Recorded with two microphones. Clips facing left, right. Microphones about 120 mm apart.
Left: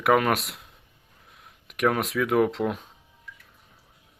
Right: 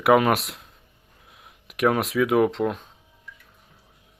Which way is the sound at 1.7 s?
5° right (ahead or behind).